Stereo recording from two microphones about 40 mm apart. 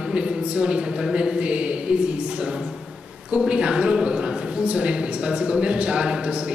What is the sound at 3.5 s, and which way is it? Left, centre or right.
A woman's voice, right.